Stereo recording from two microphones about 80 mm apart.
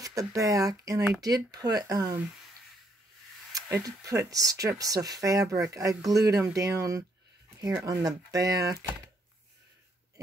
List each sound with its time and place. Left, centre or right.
0.0 s speech: right
3.8 s speech: right